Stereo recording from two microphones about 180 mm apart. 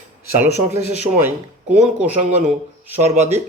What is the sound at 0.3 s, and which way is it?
Speech, 10° right (ahead or behind).